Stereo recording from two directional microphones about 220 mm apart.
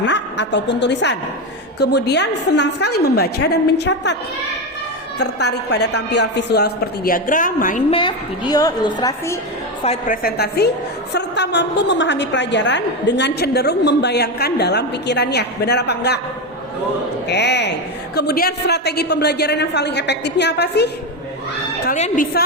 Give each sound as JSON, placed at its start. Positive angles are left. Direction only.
{"t": 0.0, "sound": "a woman's voice", "side_deg": 55}
{"t": 5.2, "sound": "a woman's voice", "side_deg": 50}
{"t": 7.9, "sound": "a woman's voice", "side_deg": 20}
{"t": 9.8, "sound": "a woman's voice", "side_deg": 30}
{"t": 10.2, "sound": "a woman's voice", "side_deg": 45}
{"t": 17.2, "sound": "a woman's voice", "side_deg": 50}
{"t": 21.8, "sound": "a woman's voice", "side_deg": 35}